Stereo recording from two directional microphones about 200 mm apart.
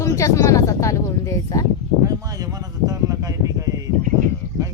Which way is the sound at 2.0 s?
15° right (ahead or behind).